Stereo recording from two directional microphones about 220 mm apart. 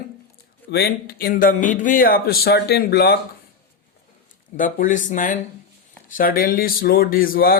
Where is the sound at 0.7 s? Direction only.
45° left (ahead or behind).